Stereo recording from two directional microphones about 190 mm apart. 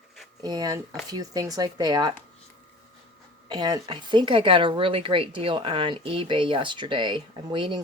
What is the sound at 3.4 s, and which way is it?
Speech, 20° right (ahead or behind).